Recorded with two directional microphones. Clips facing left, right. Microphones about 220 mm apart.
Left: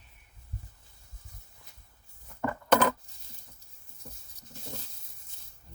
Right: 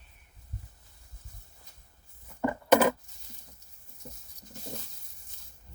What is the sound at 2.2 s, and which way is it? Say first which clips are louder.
Coin: right 3 dB; 15° right (ahead or behind).